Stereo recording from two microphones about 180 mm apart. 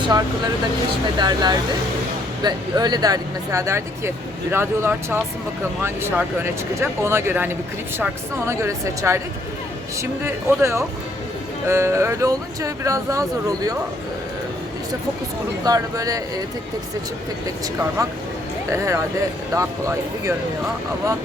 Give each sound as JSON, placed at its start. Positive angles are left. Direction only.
{"t": 1.2, "sound": "speech", "side_deg": -25}
{"t": 15.6, "sound": "speech", "side_deg": -20}
{"t": 18.7, "sound": "speech", "side_deg": -15}